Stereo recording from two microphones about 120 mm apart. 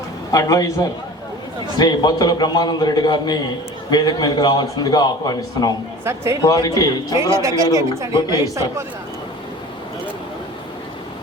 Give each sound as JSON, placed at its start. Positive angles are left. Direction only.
{"t": 0.3, "sound": "a man's voice", "side_deg": 30}
{"t": 6.1, "sound": "a woman's voice", "side_deg": -25}
{"t": 6.4, "sound": "a man's voice", "side_deg": 30}
{"t": 7.2, "sound": "a woman's voice", "side_deg": -25}